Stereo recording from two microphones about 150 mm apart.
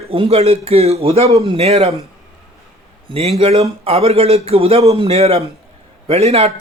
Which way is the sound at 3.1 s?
40° right (ahead or behind).